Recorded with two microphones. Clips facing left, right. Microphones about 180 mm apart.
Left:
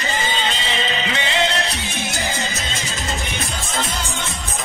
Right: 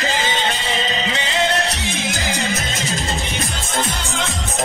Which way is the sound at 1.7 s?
90° right.